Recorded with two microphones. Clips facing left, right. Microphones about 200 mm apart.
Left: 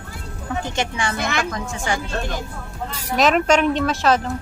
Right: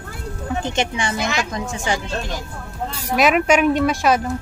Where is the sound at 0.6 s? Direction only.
20° right (ahead or behind).